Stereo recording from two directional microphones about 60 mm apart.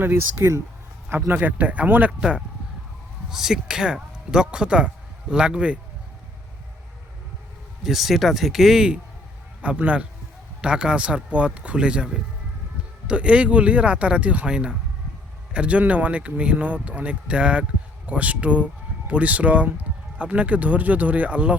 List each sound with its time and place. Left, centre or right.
0.0 s speech: right
1.4 s speech: right
3.2 s speech: centre
7.9 s speech: centre
9.6 s speech: right